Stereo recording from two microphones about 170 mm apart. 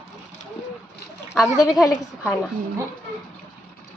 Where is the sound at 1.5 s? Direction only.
20° left (ahead or behind).